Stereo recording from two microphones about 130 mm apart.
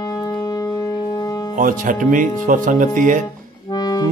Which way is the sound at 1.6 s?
90° right.